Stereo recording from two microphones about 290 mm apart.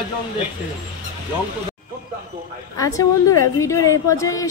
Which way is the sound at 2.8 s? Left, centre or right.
Centre.